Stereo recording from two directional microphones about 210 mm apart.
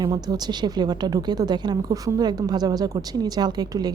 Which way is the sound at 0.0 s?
20° right (ahead or behind).